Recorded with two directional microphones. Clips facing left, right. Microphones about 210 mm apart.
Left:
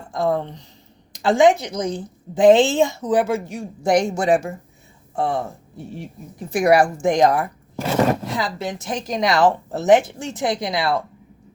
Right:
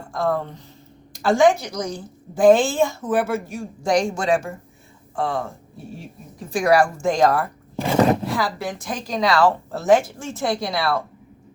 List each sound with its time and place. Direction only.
0.1 s a woman's voice: 20° left (ahead or behind)
6.5 s a woman's voice: 20° left (ahead or behind)